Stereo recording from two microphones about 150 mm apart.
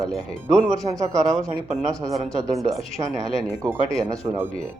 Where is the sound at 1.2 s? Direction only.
5° left (ahead or behind).